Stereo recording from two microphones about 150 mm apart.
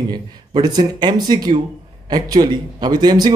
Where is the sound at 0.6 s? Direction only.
30° right (ahead or behind).